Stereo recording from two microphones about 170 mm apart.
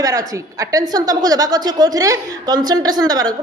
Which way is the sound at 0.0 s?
20° right (ahead or behind).